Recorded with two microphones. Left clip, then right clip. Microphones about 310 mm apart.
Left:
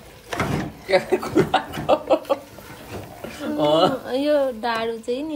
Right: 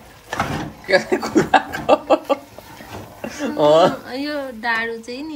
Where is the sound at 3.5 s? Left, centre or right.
Right.